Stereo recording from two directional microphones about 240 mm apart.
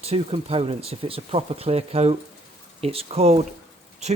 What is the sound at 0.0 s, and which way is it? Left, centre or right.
Speech, right.